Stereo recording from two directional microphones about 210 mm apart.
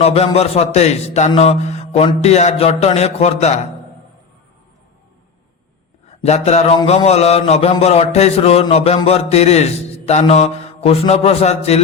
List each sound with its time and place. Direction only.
0.0 s a man's voice: 30° left (ahead or behind)
6.2 s a man's voice: 30° left (ahead or behind)